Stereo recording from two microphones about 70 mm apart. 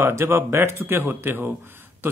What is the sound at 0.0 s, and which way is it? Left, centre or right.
Speech, right.